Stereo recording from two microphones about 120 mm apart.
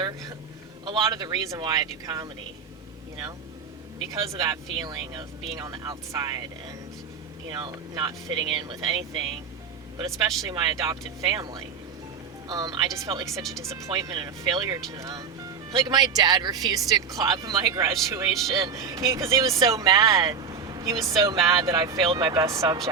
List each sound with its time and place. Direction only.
0.0 s speech: 35° right (ahead or behind)
4.3 s speech: 35° right (ahead or behind)
7.5 s speech: 35° right (ahead or behind)
10.5 s speech: 35° right (ahead or behind)
21.4 s speech: 30° right (ahead or behind)
21.9 s speech: 40° right (ahead or behind)